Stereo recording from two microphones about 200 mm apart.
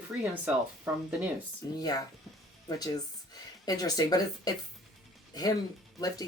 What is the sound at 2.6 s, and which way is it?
Speech, 20° left (ahead or behind).